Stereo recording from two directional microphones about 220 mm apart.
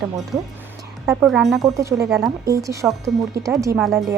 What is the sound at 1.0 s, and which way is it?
Speech, 5° right (ahead or behind).